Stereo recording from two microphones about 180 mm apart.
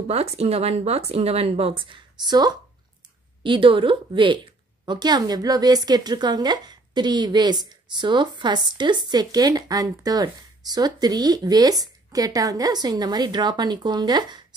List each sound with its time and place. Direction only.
0.1 s a woman's voice: 35° right (ahead or behind)